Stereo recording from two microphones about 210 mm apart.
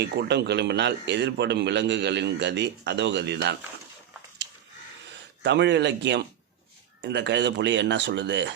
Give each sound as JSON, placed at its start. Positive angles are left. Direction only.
{"t": 0.0, "sound": "a man's voice", "side_deg": -50}
{"t": 5.4, "sound": "speech", "side_deg": -55}